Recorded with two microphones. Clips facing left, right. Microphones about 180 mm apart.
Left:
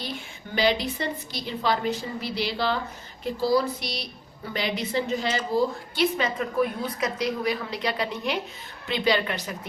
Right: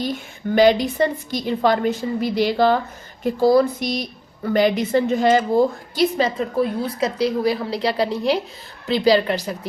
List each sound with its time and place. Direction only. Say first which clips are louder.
0.0 s a woman's voice: right 10 dB; 45° right (ahead or behind)
6.1 s a woman's voice: right 5 dB; 30° right (ahead or behind)